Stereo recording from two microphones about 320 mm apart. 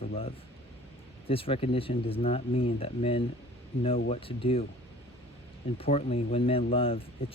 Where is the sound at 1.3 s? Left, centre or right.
Centre.